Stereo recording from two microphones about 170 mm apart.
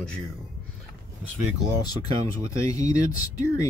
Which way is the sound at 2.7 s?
20° left (ahead or behind).